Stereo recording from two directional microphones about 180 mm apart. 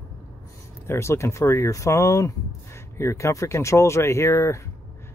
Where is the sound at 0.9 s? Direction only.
15° left (ahead or behind).